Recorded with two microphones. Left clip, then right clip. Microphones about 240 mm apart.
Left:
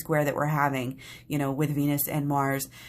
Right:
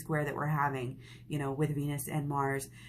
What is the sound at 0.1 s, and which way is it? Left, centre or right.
Speech, left.